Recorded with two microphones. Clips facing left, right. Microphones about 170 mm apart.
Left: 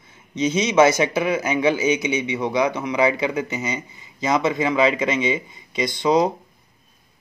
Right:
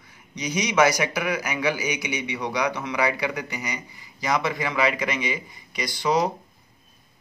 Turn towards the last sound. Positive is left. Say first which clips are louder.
# left 5 dB
turn(degrees=20)  # may be behind; listen again after turning